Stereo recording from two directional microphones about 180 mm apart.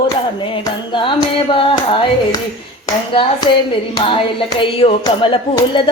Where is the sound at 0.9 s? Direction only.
25° left (ahead or behind).